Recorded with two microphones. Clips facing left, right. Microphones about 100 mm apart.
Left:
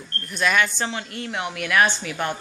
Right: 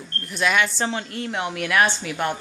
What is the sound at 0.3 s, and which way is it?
A woman's voice, 20° right (ahead or behind).